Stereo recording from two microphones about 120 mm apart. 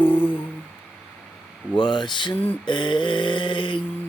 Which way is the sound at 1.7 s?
40° left (ahead or behind).